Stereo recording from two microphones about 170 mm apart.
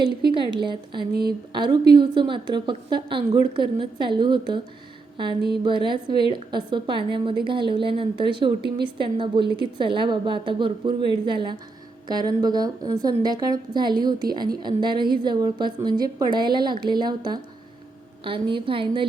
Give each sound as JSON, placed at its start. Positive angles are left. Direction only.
{"t": 0.2, "sound": "a woman's voice", "side_deg": -30}
{"t": 5.1, "sound": "a sound", "side_deg": -30}
{"t": 5.5, "sound": "a woman's voice", "side_deg": -25}